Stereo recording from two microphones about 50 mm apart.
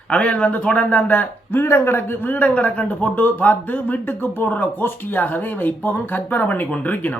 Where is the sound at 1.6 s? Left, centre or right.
Left.